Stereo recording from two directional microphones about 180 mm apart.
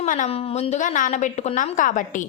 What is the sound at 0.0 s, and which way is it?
A woman's voice, 40° left (ahead or behind).